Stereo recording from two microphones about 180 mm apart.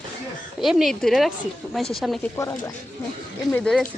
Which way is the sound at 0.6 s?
Centre (ahead or behind).